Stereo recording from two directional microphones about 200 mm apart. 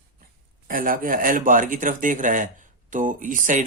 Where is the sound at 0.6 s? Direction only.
45° right (ahead or behind).